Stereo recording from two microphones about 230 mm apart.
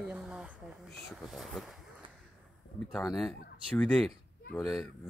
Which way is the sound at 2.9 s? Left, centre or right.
Centre.